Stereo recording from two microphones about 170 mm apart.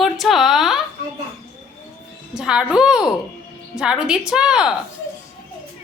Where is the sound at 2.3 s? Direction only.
5° right (ahead or behind).